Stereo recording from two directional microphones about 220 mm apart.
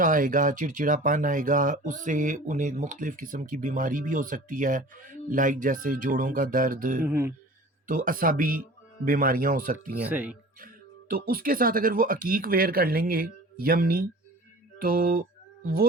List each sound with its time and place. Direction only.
0.0 s speech: 40° right (ahead or behind)
7.0 s speech: 10° right (ahead or behind)
7.9 s speech: 40° right (ahead or behind)
10.0 s speech: 5° right (ahead or behind)
11.1 s speech: 40° right (ahead or behind)